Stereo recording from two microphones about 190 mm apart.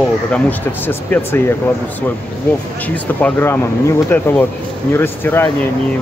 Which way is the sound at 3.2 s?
10° left (ahead or behind).